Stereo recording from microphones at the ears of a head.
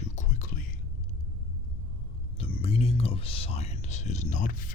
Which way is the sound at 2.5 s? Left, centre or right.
Left.